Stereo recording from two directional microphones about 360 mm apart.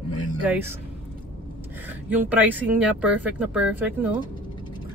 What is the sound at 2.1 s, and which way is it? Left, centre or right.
Speech, centre.